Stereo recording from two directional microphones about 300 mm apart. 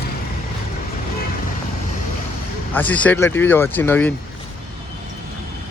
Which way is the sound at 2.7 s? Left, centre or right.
Centre.